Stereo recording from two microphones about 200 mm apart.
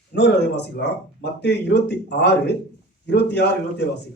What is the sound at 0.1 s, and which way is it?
Speech, 60° left (ahead or behind).